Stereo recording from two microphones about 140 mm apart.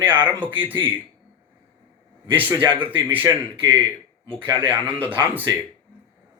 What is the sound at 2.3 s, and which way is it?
Speech, 15° right (ahead or behind).